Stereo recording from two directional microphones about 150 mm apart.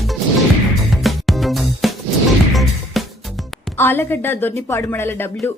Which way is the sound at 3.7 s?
15° left (ahead or behind).